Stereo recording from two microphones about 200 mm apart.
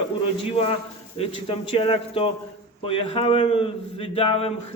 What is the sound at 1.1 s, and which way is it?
A man's voice, 25° left (ahead or behind).